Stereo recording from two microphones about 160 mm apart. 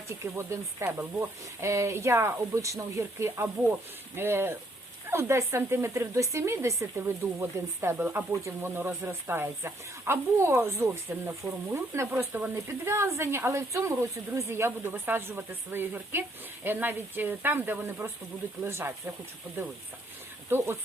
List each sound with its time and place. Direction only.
0.1 s speech: 15° right (ahead or behind)
20.5 s speech: 15° right (ahead or behind)